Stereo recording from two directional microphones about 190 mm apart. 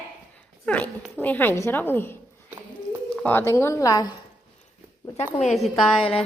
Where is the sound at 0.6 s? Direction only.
5° left (ahead or behind).